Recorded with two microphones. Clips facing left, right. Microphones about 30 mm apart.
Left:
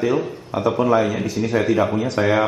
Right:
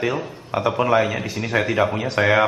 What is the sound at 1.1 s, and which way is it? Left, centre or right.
Speech, right.